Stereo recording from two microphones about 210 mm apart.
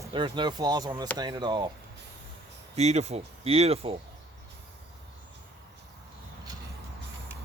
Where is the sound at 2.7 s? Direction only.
30° right (ahead or behind).